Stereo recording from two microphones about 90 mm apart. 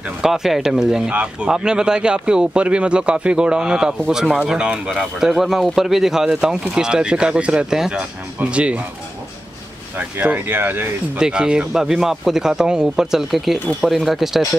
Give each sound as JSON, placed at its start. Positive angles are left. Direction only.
{"t": 0.2, "sound": "speech", "side_deg": -5}
{"t": 10.2, "sound": "speech", "side_deg": -20}
{"t": 11.1, "sound": "speech", "side_deg": -10}